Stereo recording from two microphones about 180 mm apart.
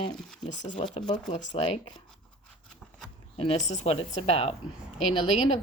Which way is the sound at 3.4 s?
35° left (ahead or behind).